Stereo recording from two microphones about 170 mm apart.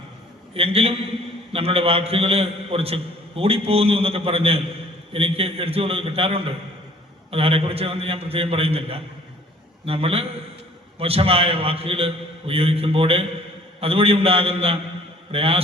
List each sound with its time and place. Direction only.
0.5 s a man's voice: 35° right (ahead or behind)